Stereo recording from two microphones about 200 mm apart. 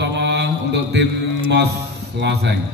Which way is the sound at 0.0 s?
60° right (ahead or behind).